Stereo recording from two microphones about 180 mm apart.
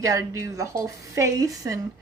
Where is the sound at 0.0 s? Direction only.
15° right (ahead or behind).